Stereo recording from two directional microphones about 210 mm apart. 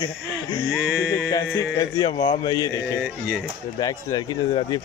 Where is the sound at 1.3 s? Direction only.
20° left (ahead or behind).